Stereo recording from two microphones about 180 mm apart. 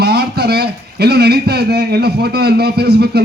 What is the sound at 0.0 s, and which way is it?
A man's voice, 65° right (ahead or behind).